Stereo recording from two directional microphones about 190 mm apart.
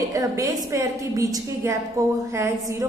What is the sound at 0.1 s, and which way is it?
A woman's voice, 20° right (ahead or behind).